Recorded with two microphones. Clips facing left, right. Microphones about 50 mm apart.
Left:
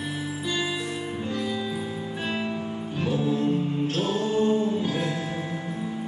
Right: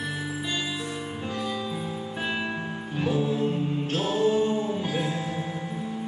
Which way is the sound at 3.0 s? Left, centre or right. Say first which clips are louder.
Even; centre.